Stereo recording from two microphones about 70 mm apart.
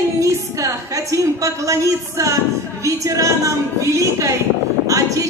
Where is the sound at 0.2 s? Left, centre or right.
Right.